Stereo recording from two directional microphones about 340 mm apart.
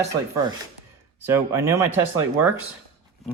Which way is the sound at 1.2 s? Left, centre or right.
Centre.